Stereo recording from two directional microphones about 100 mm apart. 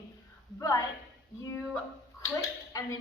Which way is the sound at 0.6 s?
35° left (ahead or behind).